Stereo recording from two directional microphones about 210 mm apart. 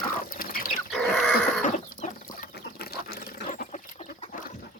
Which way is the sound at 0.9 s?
Centre (ahead or behind).